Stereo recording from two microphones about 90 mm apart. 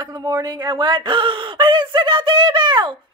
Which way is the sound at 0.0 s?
45° right (ahead or behind).